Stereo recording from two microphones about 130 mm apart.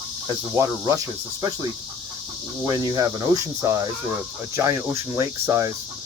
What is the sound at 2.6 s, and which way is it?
Speech, 30° right (ahead or behind).